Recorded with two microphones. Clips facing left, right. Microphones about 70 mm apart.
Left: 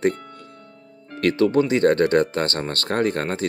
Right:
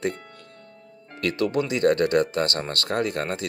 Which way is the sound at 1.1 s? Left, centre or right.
Left.